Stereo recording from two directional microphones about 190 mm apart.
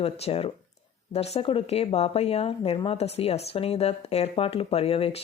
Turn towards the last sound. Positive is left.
turn(degrees=30)  # may be behind; listen again after turning